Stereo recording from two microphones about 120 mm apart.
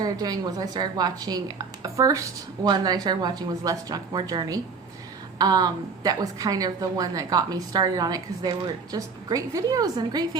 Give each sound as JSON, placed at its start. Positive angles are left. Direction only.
{"t": 0.0, "sound": "a woman's voice", "side_deg": -35}